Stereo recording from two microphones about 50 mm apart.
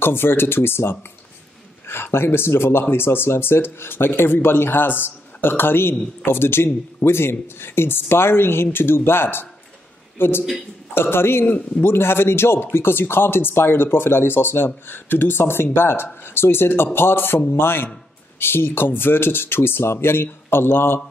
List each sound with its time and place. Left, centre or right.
0.0 s a man's voice: left